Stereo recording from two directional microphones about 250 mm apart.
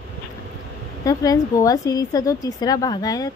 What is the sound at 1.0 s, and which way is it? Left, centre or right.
A woman's voice, centre.